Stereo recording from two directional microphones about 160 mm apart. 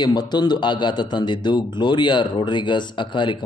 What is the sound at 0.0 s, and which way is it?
A man's voice, 25° left (ahead or behind).